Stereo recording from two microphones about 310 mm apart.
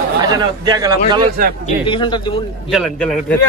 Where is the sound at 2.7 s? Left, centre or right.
Centre.